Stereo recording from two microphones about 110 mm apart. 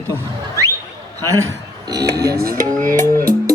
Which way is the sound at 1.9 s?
30° right (ahead or behind).